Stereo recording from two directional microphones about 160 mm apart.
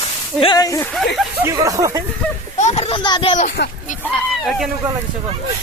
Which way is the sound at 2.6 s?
45° left (ahead or behind).